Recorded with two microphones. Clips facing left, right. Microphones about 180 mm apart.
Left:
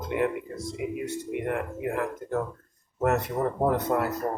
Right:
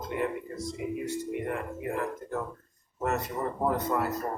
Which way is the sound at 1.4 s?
60° left (ahead or behind).